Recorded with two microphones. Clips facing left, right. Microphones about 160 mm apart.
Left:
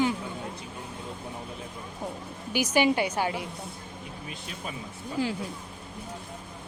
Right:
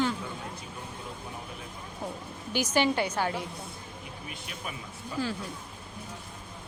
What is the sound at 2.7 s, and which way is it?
Speech, 10° left (ahead or behind).